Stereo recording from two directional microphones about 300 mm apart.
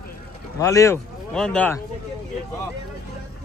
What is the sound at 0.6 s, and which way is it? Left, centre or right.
A man's voice, centre.